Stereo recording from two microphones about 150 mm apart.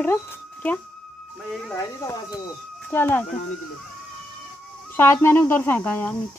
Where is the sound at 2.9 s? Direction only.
15° left (ahead or behind).